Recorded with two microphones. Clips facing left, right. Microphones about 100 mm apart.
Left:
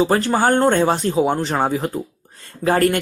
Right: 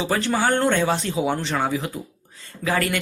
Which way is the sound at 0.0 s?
45° left (ahead or behind).